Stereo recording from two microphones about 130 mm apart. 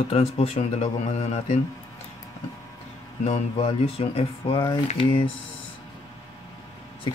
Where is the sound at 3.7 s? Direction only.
45° left (ahead or behind).